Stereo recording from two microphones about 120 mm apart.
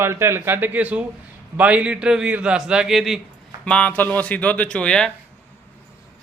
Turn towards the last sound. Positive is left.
turn(degrees=10)  # may be behind; listen again after turning